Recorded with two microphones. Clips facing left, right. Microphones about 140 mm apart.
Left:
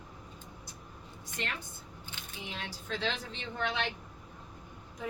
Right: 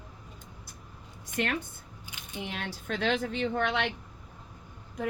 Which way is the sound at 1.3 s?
55° right (ahead or behind).